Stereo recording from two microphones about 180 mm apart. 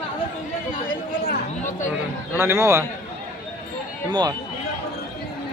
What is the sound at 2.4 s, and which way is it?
Speech, 15° right (ahead or behind).